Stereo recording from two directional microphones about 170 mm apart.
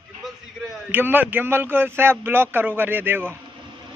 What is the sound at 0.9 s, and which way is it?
A man's voice, 10° right (ahead or behind).